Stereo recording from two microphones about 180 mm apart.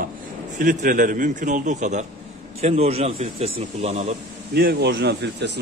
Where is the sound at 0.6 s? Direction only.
50° right (ahead or behind).